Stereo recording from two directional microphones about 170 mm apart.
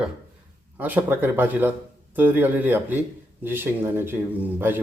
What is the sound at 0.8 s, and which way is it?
Speech, 10° right (ahead or behind).